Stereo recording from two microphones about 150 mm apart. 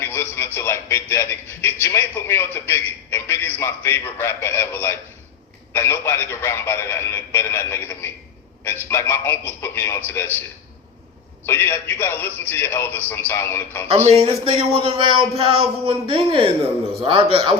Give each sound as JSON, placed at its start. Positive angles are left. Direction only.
{"t": 0.0, "sound": "a man's voice", "side_deg": 15}
{"t": 11.4, "sound": "speech", "side_deg": 15}
{"t": 14.1, "sound": "speech", "side_deg": -40}